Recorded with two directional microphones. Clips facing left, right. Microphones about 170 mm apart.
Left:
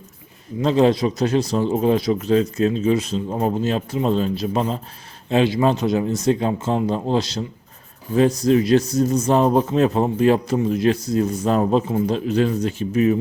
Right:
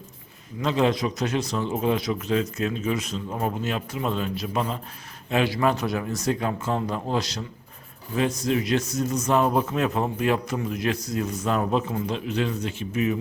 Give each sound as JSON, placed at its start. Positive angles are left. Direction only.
{"t": 0.6, "sound": "speech", "side_deg": 35}